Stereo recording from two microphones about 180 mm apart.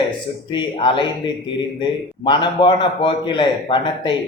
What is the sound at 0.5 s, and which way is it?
A man's voice, 25° left (ahead or behind).